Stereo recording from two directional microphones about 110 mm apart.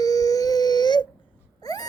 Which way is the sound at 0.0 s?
35° left (ahead or behind).